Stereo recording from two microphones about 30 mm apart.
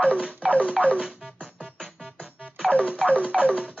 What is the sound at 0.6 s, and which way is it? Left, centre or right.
Music, left.